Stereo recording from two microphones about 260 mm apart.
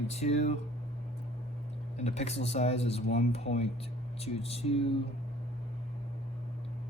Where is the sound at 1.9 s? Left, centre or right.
Left.